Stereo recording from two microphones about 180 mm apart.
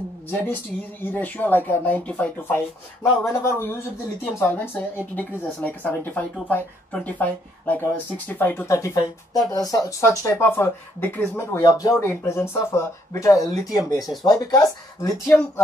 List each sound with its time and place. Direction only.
1.0 s speech: 10° left (ahead or behind)